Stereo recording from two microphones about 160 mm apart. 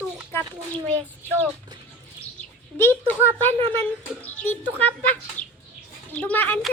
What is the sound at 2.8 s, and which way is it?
A child's voice, 15° left (ahead or behind).